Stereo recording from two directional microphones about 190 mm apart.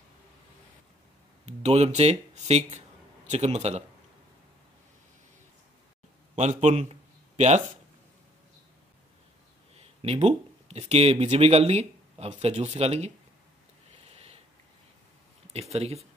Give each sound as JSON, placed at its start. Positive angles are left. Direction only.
{"t": 1.4, "sound": "a man's voice", "side_deg": -35}
{"t": 6.3, "sound": "speech", "side_deg": -35}
{"t": 9.8, "sound": "speech", "side_deg": -30}
{"t": 14.0, "sound": "sniff", "side_deg": -30}
{"t": 15.5, "sound": "a man's voice", "side_deg": -35}